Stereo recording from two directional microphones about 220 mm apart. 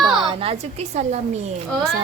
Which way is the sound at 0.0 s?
25° right (ahead or behind).